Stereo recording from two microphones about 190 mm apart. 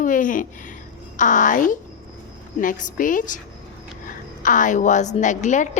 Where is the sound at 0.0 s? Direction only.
45° left (ahead or behind).